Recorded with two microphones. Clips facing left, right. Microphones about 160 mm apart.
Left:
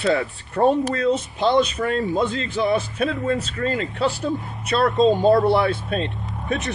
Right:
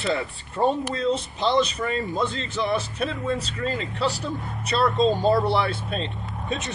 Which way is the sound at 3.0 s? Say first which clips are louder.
Left 4 dB; 55° left (ahead or behind).